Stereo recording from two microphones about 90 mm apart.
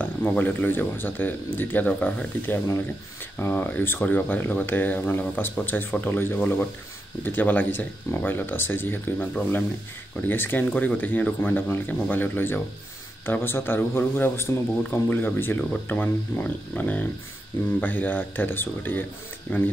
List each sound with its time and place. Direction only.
0.0 s speech: 20° left (ahead or behind)